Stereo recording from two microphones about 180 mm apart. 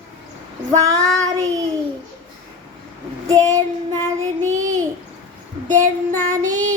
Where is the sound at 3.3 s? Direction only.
20° right (ahead or behind).